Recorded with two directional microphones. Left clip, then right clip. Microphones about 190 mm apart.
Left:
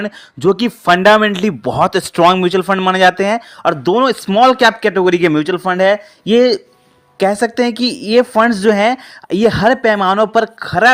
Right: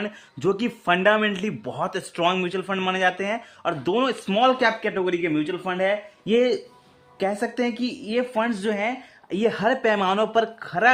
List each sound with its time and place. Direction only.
0.0 s speech: 35° left (ahead or behind)